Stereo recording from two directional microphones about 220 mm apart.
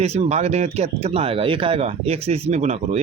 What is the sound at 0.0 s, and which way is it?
Speech, 30° right (ahead or behind).